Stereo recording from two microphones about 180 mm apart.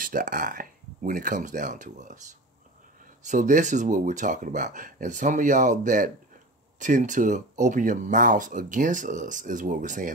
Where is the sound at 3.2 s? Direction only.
45° right (ahead or behind).